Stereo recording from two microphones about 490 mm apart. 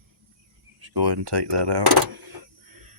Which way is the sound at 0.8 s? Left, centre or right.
Right.